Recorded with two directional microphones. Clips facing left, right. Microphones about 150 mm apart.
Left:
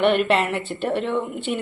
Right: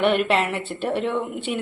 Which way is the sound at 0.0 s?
Centre (ahead or behind).